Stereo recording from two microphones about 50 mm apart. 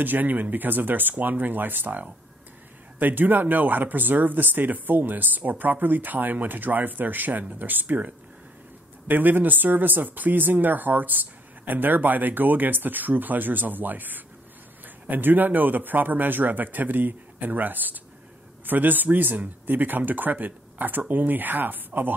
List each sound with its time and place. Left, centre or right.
0.0 s speech: right